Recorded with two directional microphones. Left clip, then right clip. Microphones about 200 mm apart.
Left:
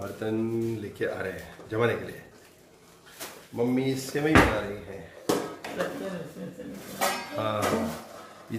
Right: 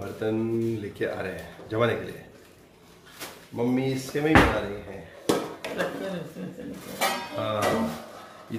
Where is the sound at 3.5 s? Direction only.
Centre (ahead or behind).